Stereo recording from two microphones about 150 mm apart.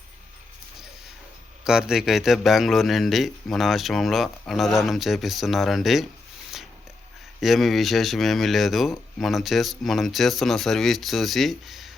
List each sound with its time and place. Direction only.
1.6 s speech: 5° right (ahead or behind)
7.4 s speech: centre (ahead or behind)